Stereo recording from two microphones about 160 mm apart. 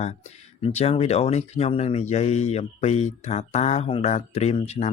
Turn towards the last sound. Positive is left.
turn(degrees=45)  # may be behind; listen again after turning